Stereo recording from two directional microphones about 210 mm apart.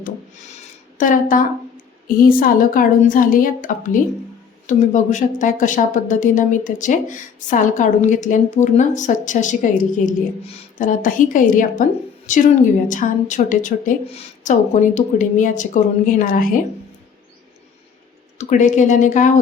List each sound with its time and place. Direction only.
0.9 s a woman's voice: 40° left (ahead or behind)
18.3 s a woman's voice: 35° left (ahead or behind)